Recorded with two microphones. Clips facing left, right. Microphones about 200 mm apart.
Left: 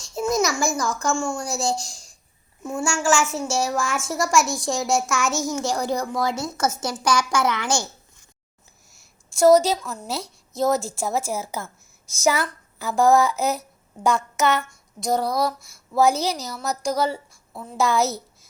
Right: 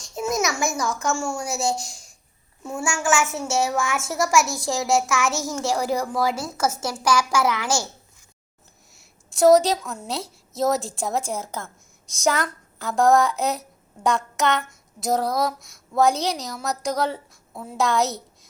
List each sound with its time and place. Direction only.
0.6 s a child's voice: 20° right (ahead or behind)
0.9 s a woman's voice: 5° right (ahead or behind)
8.9 s a woman's voice: centre (ahead or behind)